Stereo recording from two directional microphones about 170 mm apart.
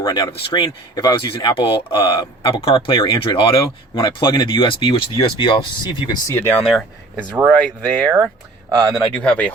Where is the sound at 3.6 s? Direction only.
20° left (ahead or behind).